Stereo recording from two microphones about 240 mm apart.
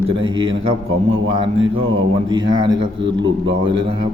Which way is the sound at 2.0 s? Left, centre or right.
Centre.